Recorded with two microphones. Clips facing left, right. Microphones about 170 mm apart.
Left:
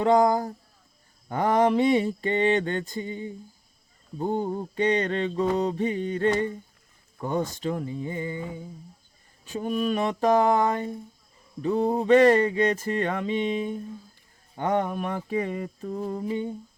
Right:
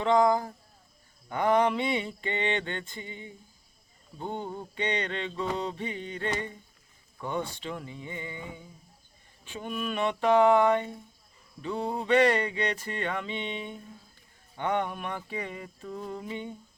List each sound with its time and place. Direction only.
0.0 s mantra: 40° left (ahead or behind)